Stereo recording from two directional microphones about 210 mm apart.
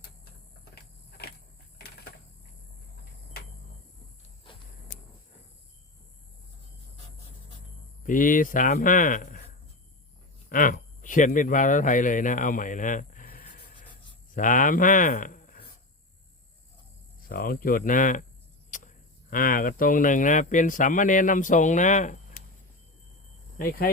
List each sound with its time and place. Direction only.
0.6 s vehicle: 50° left (ahead or behind)
1.8 s typewriter: 50° left (ahead or behind)
8.0 s speech: 40° left (ahead or behind)
10.5 s speech: 40° left (ahead or behind)
17.2 s speech: 45° left (ahead or behind)
18.7 s a sound: 35° left (ahead or behind)
19.3 s speech: 40° left (ahead or behind)
23.6 s speech: 45° left (ahead or behind)